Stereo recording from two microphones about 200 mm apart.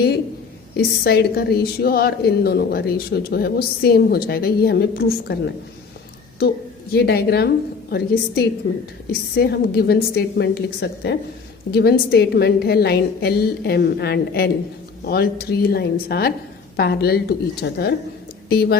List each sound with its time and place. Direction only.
0.7 s a woman's voice: 50° left (ahead or behind)
6.9 s a woman's voice: 55° left (ahead or behind)